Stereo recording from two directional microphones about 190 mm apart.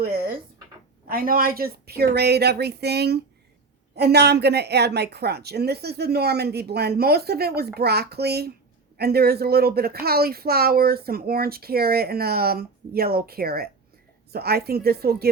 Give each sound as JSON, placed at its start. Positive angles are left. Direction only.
{"t": 1.0, "sound": "a woman's voice", "side_deg": -50}